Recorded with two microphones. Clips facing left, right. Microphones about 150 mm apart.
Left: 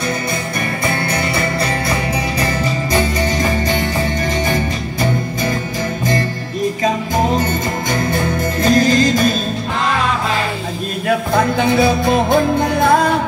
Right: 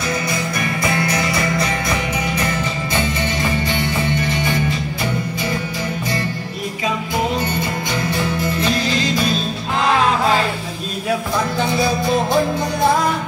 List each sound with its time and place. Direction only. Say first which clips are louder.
0.8 s music: even; 30° left (ahead or behind)
8.1 s music: left 2 dB; 45° left (ahead or behind)
11.1 s music: left 5 dB; 55° left (ahead or behind)